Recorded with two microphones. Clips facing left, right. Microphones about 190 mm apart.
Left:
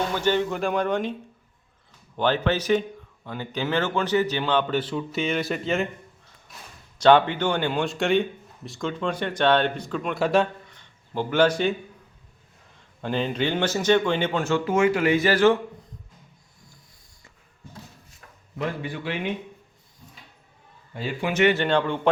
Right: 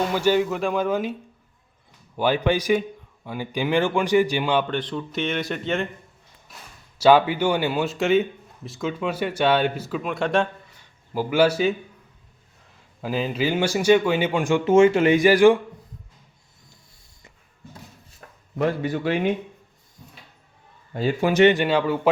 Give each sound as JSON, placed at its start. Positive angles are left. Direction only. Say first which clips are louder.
{"t": 0.1, "sound": "speech", "louder": "right 3 dB", "side_deg": -10}
{"t": 2.1, "sound": "speech", "louder": "right 2 dB", "side_deg": -10}
{"t": 4.6, "sound": "speech", "louder": "left 1 dB", "side_deg": 5}
{"t": 7.0, "sound": "speech", "louder": "right 1 dB", "side_deg": -5}
{"t": 10.8, "sound": "a sound", "louder": "right 2 dB", "side_deg": -10}
{"t": 13.0, "sound": "speech", "louder": "right 1 dB", "side_deg": -5}
{"t": 18.5, "sound": "a man's voice", "louder": "right 6 dB", "side_deg": -45}
{"t": 20.9, "sound": "a man's voice", "louder": "right 6 dB", "side_deg": -40}
{"t": 21.5, "sound": "speech", "louder": "right 2 dB", "side_deg": -10}